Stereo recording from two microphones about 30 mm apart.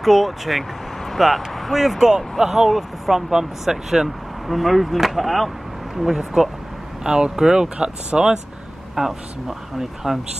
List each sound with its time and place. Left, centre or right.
0.0 s speech: centre
1.7 s speech: centre
4.5 s speech: centre
7.0 s speech: right
8.9 s speech: centre